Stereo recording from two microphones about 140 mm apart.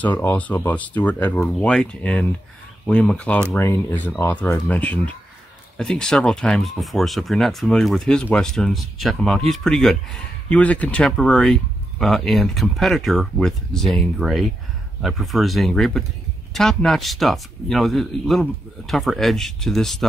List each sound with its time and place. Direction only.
0.0 s speech: 15° left (ahead or behind)